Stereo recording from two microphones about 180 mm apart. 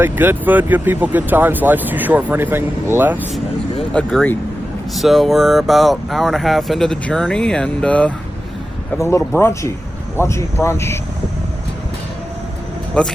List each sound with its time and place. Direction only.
0.0 s speech: 10° right (ahead or behind)
3.9 s speech: 5° left (ahead or behind)
12.9 s speech: 5° left (ahead or behind)